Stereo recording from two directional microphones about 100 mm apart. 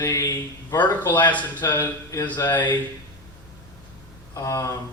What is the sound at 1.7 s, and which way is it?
Speech, 20° left (ahead or behind).